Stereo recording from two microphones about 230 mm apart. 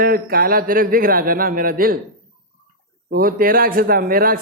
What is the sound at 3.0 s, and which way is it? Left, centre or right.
Speech, right.